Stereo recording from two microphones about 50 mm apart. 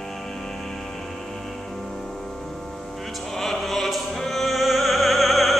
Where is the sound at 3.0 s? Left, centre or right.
Centre.